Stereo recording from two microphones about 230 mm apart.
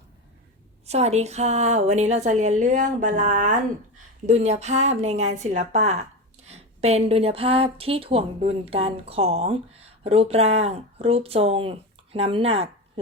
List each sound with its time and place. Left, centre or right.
0.9 s a woman's voice: right